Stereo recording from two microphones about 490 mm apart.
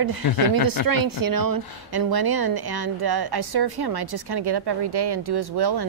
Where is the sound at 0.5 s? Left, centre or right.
Right.